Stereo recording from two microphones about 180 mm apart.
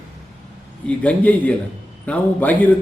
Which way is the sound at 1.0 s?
5° left (ahead or behind).